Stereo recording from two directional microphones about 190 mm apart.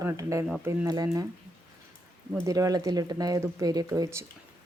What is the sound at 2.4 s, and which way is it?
Speech, 15° right (ahead or behind).